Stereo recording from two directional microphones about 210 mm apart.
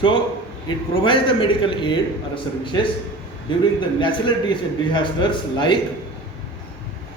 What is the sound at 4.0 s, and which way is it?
A man's voice, 20° left (ahead or behind).